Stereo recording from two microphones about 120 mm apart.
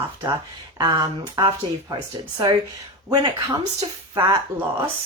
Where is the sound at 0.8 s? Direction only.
40° right (ahead or behind).